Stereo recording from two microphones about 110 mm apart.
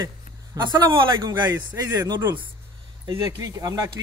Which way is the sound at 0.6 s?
45° right (ahead or behind).